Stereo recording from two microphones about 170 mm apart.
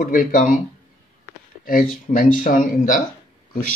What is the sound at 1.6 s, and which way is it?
Speech, 55° left (ahead or behind).